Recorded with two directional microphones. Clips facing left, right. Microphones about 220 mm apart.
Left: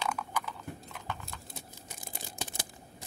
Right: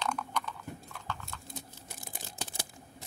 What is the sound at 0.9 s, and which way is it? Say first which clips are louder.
Horse: left 1 dB; 20° left (ahead or behind).